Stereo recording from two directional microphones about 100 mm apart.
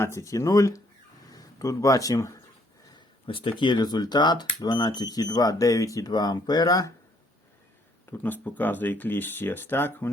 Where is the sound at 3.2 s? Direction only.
60° left (ahead or behind); by 6.9 s 40° left (ahead or behind).